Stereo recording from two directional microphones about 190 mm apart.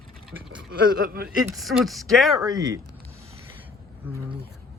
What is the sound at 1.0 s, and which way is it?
Speech, 50° right (ahead or behind).